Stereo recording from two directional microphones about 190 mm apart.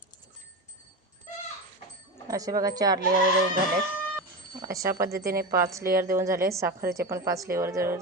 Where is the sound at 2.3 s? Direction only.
20° right (ahead or behind).